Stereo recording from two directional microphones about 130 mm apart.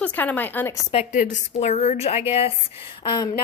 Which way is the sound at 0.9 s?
70° left (ahead or behind).